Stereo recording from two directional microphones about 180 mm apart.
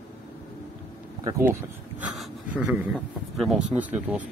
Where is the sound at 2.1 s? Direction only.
5° right (ahead or behind).